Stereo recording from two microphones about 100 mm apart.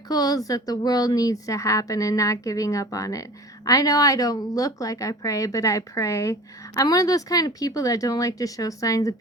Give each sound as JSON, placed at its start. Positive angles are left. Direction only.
{"t": 0.1, "sound": "a woman's voice", "side_deg": 40}